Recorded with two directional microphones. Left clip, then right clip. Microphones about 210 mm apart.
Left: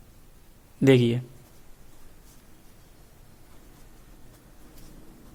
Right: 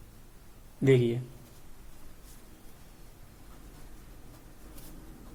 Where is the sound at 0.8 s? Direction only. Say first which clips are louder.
Left 5 dB; 50° left (ahead or behind).